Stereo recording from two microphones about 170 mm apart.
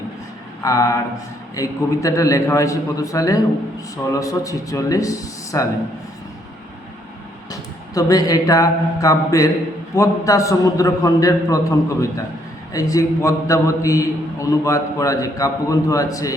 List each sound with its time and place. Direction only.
0.6 s a man's voice: 20° left (ahead or behind)
7.5 s a man's voice: 20° left (ahead or behind)